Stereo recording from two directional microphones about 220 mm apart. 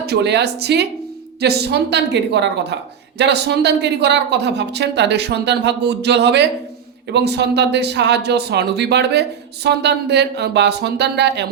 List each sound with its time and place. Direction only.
0.0 s a man's voice: 50° right (ahead or behind)